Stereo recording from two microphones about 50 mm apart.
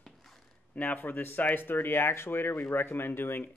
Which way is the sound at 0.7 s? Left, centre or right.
Left.